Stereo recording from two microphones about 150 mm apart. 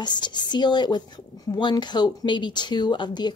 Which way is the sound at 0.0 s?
30° left (ahead or behind).